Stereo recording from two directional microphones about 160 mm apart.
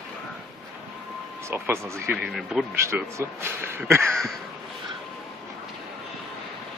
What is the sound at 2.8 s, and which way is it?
A man's voice, 15° right (ahead or behind).